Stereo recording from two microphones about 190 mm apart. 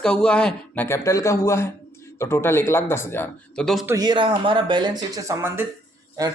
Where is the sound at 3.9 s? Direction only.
20° right (ahead or behind).